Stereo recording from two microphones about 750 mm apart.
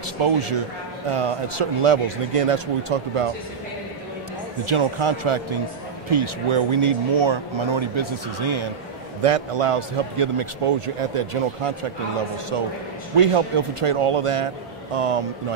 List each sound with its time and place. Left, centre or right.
0.2 s speech: right
4.6 s speech: right
13.1 s speech: right